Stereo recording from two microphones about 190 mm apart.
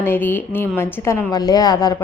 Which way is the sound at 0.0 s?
10° left (ahead or behind).